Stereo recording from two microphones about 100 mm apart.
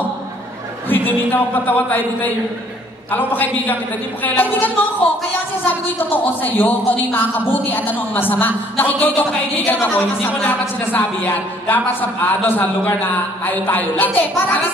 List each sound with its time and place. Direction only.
0.8 s a woman's voice: 20° left (ahead or behind)
6.1 s a woman's voice: 20° left (ahead or behind)